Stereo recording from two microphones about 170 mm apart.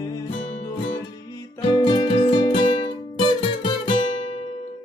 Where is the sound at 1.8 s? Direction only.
25° left (ahead or behind).